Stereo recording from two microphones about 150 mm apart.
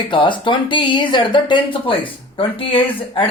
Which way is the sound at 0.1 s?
35° left (ahead or behind).